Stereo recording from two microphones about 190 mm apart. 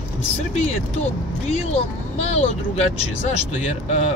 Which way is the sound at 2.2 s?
35° left (ahead or behind).